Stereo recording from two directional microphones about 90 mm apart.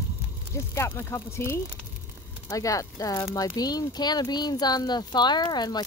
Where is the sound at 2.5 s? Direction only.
40° left (ahead or behind).